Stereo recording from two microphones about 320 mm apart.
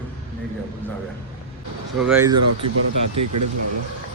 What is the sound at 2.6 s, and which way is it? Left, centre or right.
Speech, right.